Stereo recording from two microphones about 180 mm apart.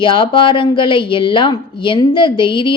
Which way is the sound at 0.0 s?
25° left (ahead or behind).